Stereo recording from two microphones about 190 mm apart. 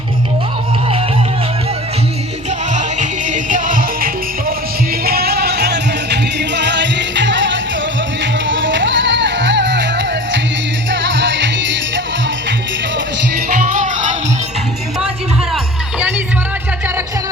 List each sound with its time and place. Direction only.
2.7 s music: 40° right (ahead or behind); by 12.0 s 70° right (ahead or behind)
13.7 s music: 40° right (ahead or behind)
15.5 s music: 10° right (ahead or behind)